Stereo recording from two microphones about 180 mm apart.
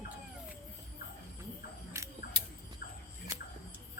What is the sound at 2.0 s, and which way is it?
Camera, 15° right (ahead or behind).